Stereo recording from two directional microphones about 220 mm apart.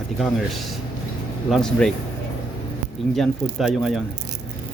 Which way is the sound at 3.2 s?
Centre (ahead or behind).